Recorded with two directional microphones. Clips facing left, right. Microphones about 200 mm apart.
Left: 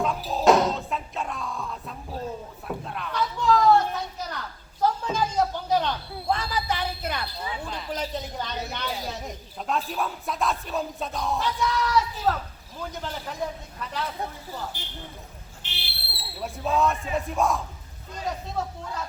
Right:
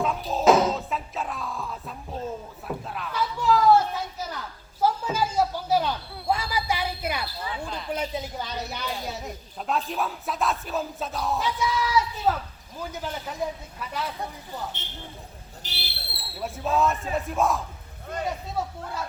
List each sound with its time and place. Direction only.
0.0 s music: centre (ahead or behind)
8.1 s a sound: 5° right (ahead or behind)
8.9 s a man's voice: centre (ahead or behind)
14.7 s a man's voice: 25° right (ahead or behind)
15.6 s a sound: 40° right (ahead or behind)
16.4 s speech: centre (ahead or behind)